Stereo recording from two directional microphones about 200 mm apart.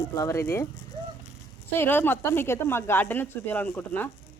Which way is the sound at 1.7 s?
10° left (ahead or behind).